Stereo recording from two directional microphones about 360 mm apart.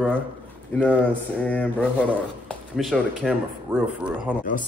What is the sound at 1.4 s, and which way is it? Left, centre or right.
Speech, centre.